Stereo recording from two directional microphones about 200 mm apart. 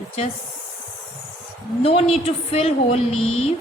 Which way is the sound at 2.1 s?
30° left (ahead or behind).